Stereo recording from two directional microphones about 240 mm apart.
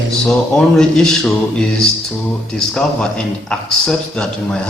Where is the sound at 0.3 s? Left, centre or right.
Centre.